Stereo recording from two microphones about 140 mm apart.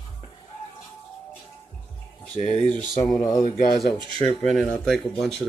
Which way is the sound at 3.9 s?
35° right (ahead or behind).